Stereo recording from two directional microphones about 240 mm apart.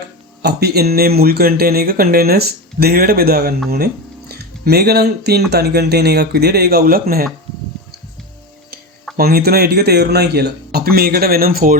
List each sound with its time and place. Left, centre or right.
0.4 s speech: right
9.1 s speech: right